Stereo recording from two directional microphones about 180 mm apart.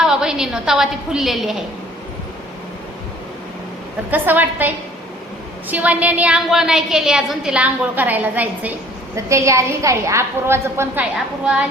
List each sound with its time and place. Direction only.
0.0 s a woman's voice: 5° right (ahead or behind)
4.1 s a woman's voice: 10° right (ahead or behind)